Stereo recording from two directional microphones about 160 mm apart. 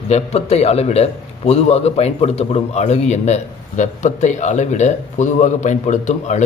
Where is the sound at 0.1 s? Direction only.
40° left (ahead or behind).